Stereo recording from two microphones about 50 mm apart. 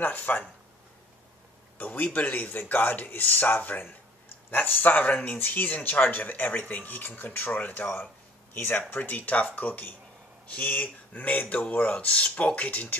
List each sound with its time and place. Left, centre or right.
0.0 s speech: left
1.8 s speech: left
8.9 s speech: left